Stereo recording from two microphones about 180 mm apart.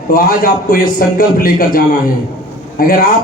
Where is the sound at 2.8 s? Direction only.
55° left (ahead or behind).